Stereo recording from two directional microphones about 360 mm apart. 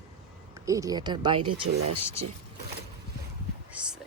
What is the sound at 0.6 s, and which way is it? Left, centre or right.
Speech, centre.